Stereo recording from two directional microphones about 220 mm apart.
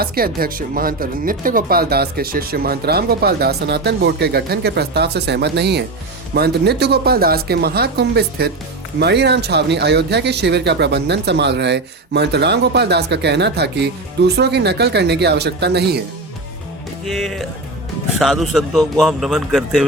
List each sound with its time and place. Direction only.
0.0 s speech: 45° right (ahead or behind)
17.1 s a man's voice: centre (ahead or behind)